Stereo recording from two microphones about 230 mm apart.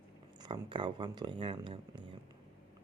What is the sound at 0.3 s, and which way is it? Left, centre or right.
Speech, centre.